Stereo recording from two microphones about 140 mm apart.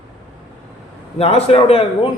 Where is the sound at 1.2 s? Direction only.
45° left (ahead or behind).